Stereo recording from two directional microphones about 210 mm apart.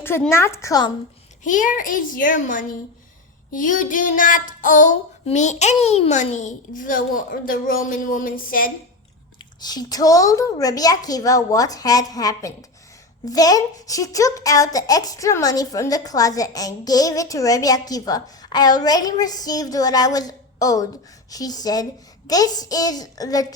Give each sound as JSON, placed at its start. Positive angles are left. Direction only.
{"t": 0.0, "sound": "a woman's voice", "side_deg": 10}
{"t": 1.5, "sound": "child singing", "side_deg": 40}
{"t": 9.6, "sound": "a woman's voice", "side_deg": 20}